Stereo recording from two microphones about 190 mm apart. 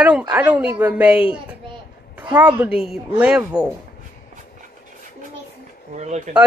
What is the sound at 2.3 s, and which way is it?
A woman's voice, 5° right (ahead or behind).